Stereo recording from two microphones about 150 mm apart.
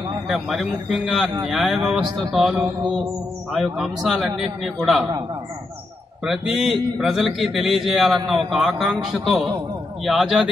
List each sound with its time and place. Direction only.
0.3 s a man's voice: centre (ahead or behind)
6.2 s a man's voice: 5° right (ahead or behind)